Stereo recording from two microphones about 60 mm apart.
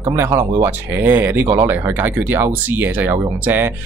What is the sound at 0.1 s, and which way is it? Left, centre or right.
Speech, right.